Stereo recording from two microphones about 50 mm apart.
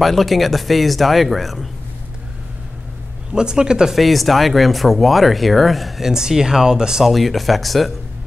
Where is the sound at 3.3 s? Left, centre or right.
Centre.